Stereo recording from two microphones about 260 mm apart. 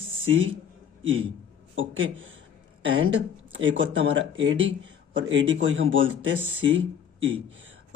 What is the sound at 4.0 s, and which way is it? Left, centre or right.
Speech, right.